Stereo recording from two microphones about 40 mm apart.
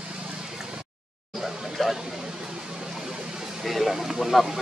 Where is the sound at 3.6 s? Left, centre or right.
Centre.